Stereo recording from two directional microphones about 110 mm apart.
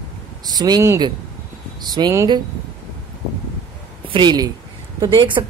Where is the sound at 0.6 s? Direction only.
40° right (ahead or behind).